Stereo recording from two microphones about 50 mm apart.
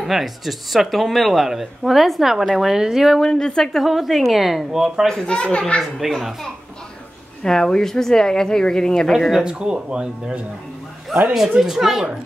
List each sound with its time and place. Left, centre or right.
0.0 s speech: centre
3.2 s speech: centre
3.8 s speech: centre
5.0 s speech: centre
7.4 s speech: centre
9.4 s speech: centre
11.1 s speech: centre